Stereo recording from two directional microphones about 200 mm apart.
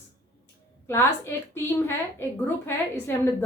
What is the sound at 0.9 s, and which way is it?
Speech, 10° left (ahead or behind).